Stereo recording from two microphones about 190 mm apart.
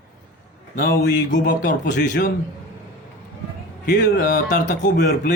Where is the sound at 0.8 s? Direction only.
55° left (ahead or behind).